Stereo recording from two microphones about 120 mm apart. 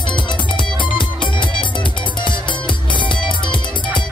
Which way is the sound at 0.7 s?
40° left (ahead or behind).